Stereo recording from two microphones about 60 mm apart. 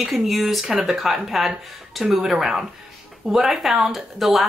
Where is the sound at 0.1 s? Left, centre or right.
Centre.